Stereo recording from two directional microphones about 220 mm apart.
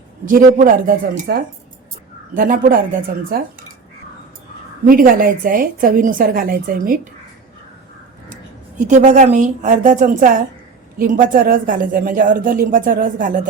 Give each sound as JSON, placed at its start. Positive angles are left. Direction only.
{"t": 0.3, "sound": "a woman's voice", "side_deg": -40}
{"t": 4.9, "sound": "a woman's voice", "side_deg": -40}
{"t": 8.8, "sound": "a woman's voice", "side_deg": -35}